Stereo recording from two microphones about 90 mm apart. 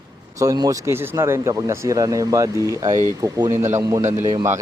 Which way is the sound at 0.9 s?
25° right (ahead or behind).